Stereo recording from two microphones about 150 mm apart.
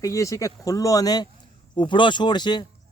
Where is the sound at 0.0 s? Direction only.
20° left (ahead or behind).